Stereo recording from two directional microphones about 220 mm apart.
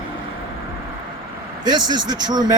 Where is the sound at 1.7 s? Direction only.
20° right (ahead or behind).